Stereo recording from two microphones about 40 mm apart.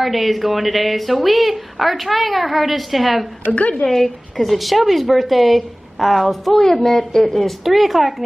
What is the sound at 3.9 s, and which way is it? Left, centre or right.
A woman's voice, centre.